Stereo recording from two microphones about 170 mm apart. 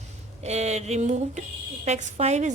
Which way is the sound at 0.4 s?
40° right (ahead or behind).